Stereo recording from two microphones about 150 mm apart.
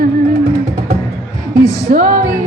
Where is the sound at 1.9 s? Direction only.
55° right (ahead or behind).